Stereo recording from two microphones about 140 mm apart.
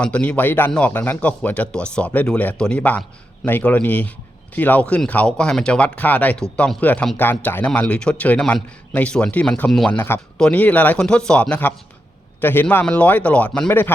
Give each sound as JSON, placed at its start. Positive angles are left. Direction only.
{"t": 0.0, "sound": "speech", "side_deg": 10}